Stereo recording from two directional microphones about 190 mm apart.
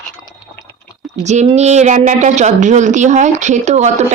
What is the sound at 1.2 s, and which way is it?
A woman's voice, 40° right (ahead or behind).